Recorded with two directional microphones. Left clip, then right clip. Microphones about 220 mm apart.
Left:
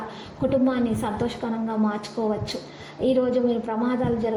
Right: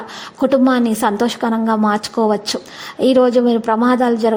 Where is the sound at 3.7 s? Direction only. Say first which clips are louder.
Right 11 dB; 35° right (ahead or behind).